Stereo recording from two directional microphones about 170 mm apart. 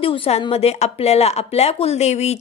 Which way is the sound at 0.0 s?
30° left (ahead or behind).